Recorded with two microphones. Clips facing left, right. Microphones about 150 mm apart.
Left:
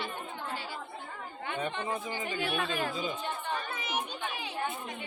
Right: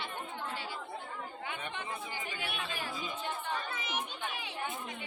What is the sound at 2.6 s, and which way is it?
Speech, 55° left (ahead or behind).